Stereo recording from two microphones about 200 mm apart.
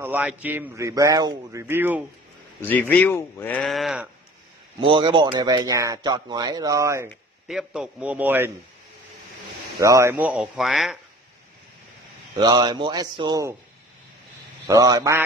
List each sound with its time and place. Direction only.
0.0 s a man's voice: 10° right (ahead or behind)
2.6 s speech: 10° left (ahead or behind)
4.7 s speech: 25° right (ahead or behind)
7.4 s a man's voice: centre (ahead or behind)
9.8 s a man's voice: 15° right (ahead or behind)
12.4 s speech: 20° right (ahead or behind)
14.7 s a man's voice: 20° right (ahead or behind)